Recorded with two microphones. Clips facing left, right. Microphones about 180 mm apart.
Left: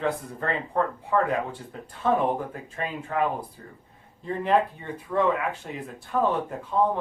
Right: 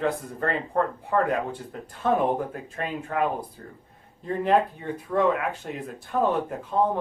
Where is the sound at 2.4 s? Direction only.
45° right (ahead or behind).